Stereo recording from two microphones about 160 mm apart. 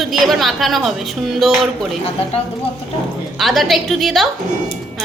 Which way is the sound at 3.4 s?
Centre (ahead or behind).